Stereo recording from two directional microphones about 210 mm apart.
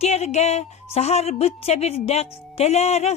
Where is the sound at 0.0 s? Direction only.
30° left (ahead or behind).